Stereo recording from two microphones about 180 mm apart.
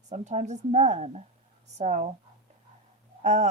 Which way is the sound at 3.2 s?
40° right (ahead or behind).